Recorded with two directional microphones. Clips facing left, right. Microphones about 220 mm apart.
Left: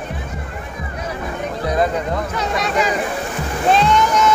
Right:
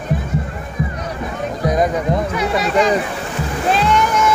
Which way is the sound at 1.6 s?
15° right (ahead or behind).